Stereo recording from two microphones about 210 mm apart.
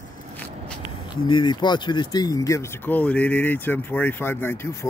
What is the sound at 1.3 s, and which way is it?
Speech, 20° left (ahead or behind).